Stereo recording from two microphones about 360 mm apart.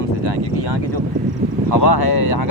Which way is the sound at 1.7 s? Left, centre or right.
Left.